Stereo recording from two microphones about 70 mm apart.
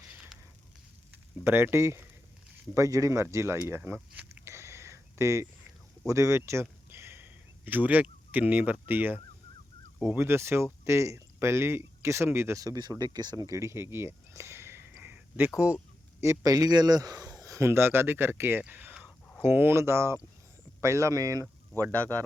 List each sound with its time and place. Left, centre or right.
1.5 s speech: right
2.7 s speech: right
3.9 s a sound: centre
4.4 s a sound: right
6.1 s speech: right
12.5 s speech: right
15.0 s a sound: right
16.2 s speech: right
17.7 s speech: right
18.6 s whispering: right
19.4 s speech: right